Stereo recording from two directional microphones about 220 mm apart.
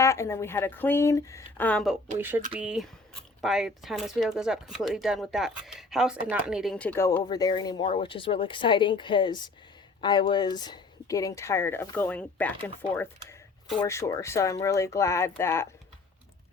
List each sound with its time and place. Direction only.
0.0 s speech: 15° left (ahead or behind)
2.1 s speech: 10° right (ahead or behind); by 12.5 s 5° left (ahead or behind)
13.8 s speech: 10° left (ahead or behind)